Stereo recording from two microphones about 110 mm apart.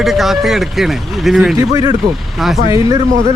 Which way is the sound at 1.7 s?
30° right (ahead or behind).